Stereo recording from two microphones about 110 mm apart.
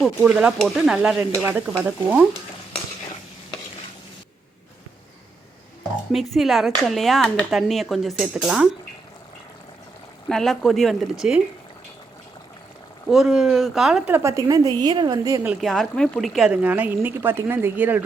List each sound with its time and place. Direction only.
0.2 s speech: 10° right (ahead or behind)
6.1 s speech: centre (ahead or behind)
10.2 s speech: 5° left (ahead or behind)
13.1 s speech: 5° right (ahead or behind)
14.1 s a woman's voice: 25° right (ahead or behind)
15.6 s speech: 5° left (ahead or behind); by 18.0 s 15° right (ahead or behind)